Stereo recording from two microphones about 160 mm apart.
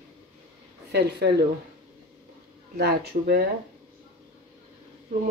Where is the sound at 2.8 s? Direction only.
90° right.